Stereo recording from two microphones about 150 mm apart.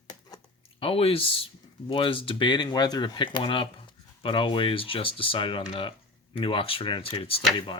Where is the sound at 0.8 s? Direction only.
40° left (ahead or behind).